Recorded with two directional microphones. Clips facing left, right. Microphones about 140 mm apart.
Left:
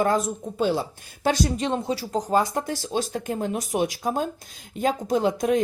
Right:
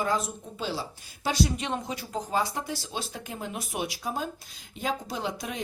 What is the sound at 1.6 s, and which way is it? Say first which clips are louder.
Speech: left 7 dB; 35° left (ahead or behind).